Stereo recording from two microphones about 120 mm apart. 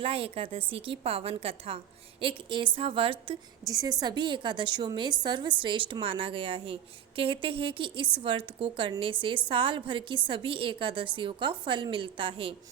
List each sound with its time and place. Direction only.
0.0 s a woman's voice: 50° right (ahead or behind)
3.7 s a woman's voice: 30° right (ahead or behind); by 12.5 s 50° right (ahead or behind)